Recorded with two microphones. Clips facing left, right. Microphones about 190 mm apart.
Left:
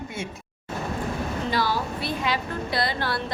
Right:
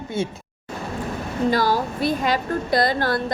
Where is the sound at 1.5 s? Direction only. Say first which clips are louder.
Right 4 dB; 45° right (ahead or behind).